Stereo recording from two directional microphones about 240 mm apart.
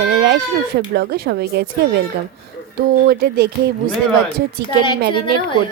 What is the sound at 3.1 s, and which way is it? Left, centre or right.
Speech, right.